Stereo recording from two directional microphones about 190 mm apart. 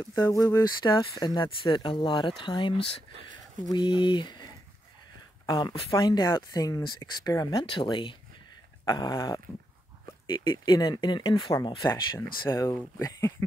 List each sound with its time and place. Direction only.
0.1 s speech: 20° left (ahead or behind)
5.5 s speech: 20° left (ahead or behind)